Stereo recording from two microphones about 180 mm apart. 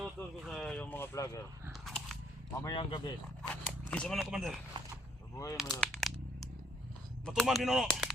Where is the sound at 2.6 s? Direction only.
25° left (ahead or behind).